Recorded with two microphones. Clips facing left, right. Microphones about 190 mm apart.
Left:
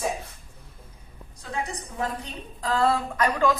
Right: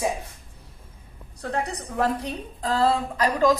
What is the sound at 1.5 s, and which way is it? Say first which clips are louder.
Speech: right 4 dB; 65° right (ahead or behind).